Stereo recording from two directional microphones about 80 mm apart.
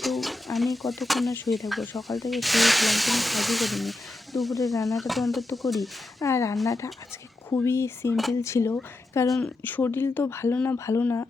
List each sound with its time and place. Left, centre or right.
0.0 s bird: centre
1.5 s speech: centre
6.2 s speech: left
8.1 s speech: centre
8.4 s speech: left
9.4 s speech: left
10.5 s speech: left